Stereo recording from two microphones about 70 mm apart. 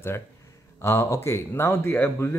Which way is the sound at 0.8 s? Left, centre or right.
Left.